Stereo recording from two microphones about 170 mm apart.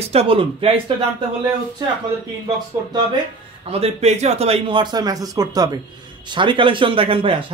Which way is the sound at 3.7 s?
35° right (ahead or behind).